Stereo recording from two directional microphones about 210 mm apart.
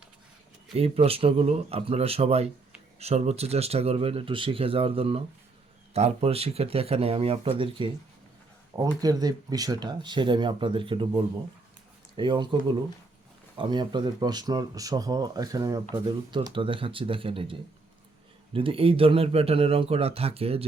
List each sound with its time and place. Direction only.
0.8 s speech: 30° right (ahead or behind)